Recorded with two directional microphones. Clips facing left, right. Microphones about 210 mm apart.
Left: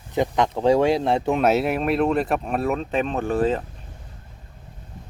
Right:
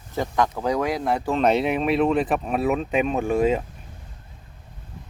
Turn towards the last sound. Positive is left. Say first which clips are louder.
# right 1 dB
turn(degrees=-10)  # may be behind; listen again after turning